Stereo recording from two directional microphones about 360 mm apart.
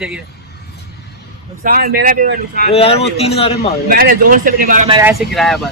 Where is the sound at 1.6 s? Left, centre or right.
Right.